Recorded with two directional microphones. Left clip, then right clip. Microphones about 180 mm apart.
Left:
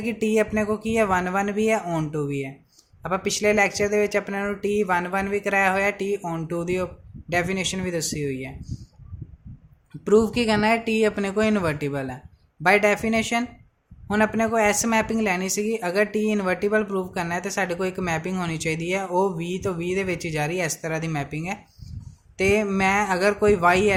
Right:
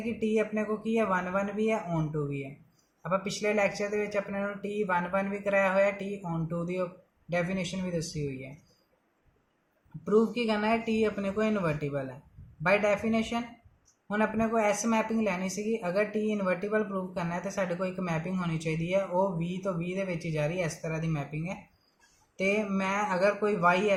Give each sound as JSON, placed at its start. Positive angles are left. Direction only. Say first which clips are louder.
{"t": 0.0, "sound": "speech", "louder": "left 7 dB", "side_deg": 65}
{"t": 10.0, "sound": "speech", "louder": "left 7 dB", "side_deg": 70}